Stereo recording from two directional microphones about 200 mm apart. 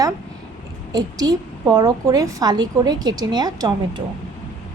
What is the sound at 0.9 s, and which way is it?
A woman's voice, 20° right (ahead or behind).